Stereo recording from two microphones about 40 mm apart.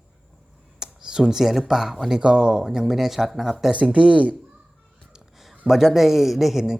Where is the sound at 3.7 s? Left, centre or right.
Right.